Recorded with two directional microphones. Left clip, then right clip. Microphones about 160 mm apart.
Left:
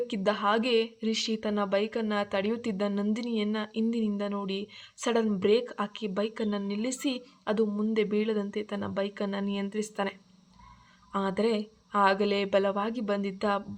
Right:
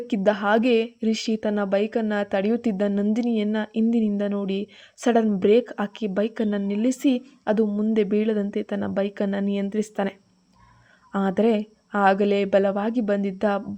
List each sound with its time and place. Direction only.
0.1 s speech: 50° right (ahead or behind)